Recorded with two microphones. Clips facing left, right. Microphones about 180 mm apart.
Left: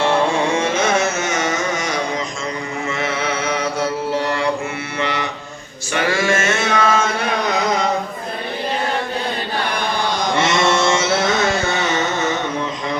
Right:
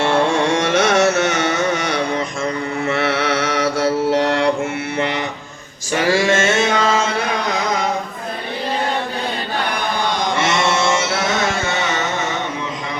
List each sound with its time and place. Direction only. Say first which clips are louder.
0.7 s carnatic music: right 3 dB; 80° right; by 2.2 s 60° right (ahead or behind)
2.9 s mantra: right 4 dB; 65° right (ahead or behind)
6.1 s music: right 3 dB; 30° right (ahead or behind)